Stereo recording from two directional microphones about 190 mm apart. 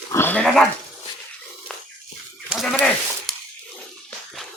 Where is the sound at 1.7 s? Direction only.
5° left (ahead or behind).